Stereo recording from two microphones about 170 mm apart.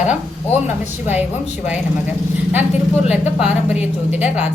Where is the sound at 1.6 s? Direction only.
10° right (ahead or behind).